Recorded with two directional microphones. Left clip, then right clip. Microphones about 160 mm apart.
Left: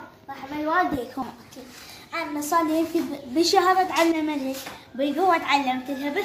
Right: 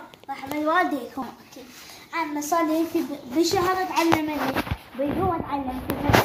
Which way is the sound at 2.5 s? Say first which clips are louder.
Left 1 dB; 5° right (ahead or behind).